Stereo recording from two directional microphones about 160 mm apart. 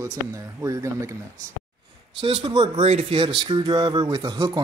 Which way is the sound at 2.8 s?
45° right (ahead or behind).